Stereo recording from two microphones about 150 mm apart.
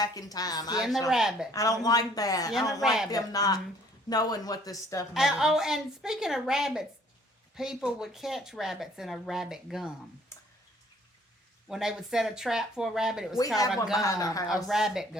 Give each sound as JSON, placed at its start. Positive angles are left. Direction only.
{"t": 0.0, "sound": "speech", "side_deg": 25}
{"t": 0.8, "sound": "speech", "side_deg": 0}
{"t": 1.5, "sound": "speech", "side_deg": 25}
{"t": 2.8, "sound": "speech", "side_deg": 0}
{"t": 3.1, "sound": "speech", "side_deg": 25}
{"t": 5.1, "sound": "speech", "side_deg": -5}
{"t": 11.7, "sound": "speech", "side_deg": -5}
{"t": 14.0, "sound": "speech", "side_deg": 20}
{"t": 14.5, "sound": "speech", "side_deg": 0}